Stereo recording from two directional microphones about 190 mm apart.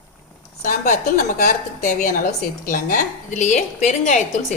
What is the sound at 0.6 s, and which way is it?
A woman's voice, 45° left (ahead or behind).